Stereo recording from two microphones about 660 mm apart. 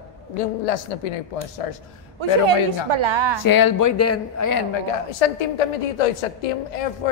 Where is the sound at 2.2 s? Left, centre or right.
Right.